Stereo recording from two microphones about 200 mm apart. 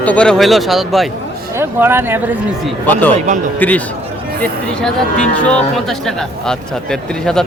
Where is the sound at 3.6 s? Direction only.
10° left (ahead or behind).